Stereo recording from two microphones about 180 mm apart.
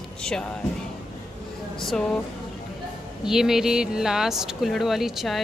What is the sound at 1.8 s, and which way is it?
Speech, centre (ahead or behind).